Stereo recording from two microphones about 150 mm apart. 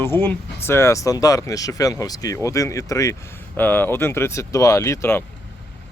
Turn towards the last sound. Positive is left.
turn(degrees=15)  # may be behind; listen again after turning